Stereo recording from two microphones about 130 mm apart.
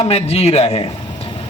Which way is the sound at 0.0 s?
50° left (ahead or behind).